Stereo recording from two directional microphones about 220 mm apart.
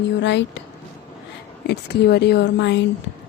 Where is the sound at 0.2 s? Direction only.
55° left (ahead or behind).